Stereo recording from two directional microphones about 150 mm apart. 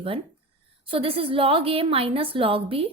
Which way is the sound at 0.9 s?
35° right (ahead or behind).